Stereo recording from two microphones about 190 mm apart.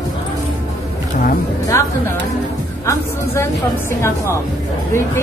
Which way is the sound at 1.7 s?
15° left (ahead or behind).